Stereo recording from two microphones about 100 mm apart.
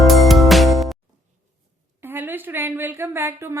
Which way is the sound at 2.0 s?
20° right (ahead or behind).